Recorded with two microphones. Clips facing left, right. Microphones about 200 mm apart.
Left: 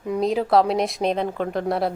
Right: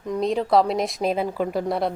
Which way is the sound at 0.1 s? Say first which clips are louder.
Left 1 dB; centre (ahead or behind).